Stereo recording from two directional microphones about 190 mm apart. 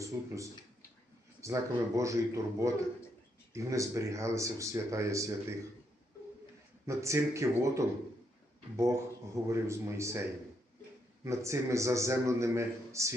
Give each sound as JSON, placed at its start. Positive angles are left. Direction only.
{"t": 0.1, "sound": "speech", "side_deg": -15}
{"t": 1.4, "sound": "speech", "side_deg": -15}
{"t": 6.8, "sound": "speech", "side_deg": -15}